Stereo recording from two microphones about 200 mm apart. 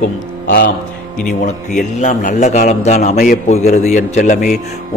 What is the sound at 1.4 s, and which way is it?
A man's voice, 35° left (ahead or behind).